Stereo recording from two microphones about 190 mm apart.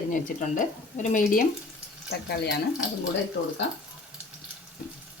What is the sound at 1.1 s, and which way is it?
Frying, 45° left (ahead or behind).